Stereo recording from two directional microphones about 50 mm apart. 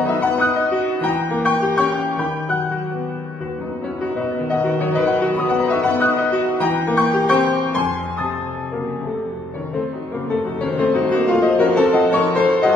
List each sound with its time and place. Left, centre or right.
0.0 s music: left
4.2 s music: left
10.3 s music: left